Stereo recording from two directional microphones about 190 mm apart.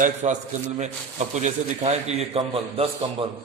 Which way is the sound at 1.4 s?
35° right (ahead or behind).